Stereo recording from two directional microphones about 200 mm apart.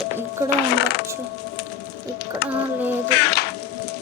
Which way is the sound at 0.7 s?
55° left (ahead or behind).